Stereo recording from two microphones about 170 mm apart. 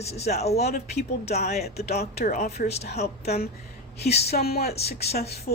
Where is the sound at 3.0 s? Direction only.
70° left (ahead or behind).